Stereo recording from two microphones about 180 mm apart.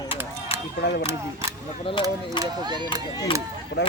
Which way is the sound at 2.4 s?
25° right (ahead or behind).